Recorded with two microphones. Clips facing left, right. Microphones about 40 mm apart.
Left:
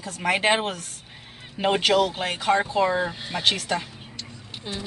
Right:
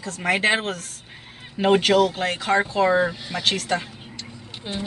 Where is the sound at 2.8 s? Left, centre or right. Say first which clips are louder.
Right 4 dB; centre.